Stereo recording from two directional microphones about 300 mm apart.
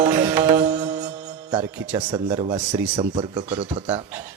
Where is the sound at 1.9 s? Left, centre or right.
Centre.